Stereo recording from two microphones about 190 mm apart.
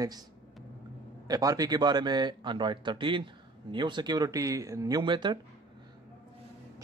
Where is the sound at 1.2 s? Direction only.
20° right (ahead or behind).